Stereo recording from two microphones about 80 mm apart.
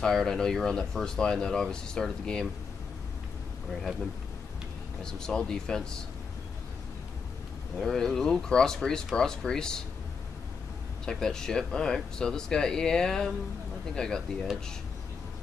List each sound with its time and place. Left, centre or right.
0.0 s speech: centre
5.0 s speech: centre
7.8 s speech: centre
11.1 s speech: centre